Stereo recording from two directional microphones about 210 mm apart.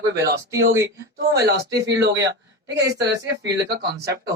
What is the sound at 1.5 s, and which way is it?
Speech, 55° right (ahead or behind).